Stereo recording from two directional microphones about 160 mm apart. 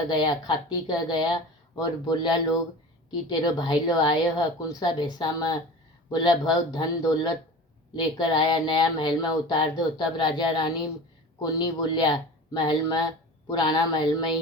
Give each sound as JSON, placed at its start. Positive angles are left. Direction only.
{"t": 0.1, "sound": "speech", "side_deg": 25}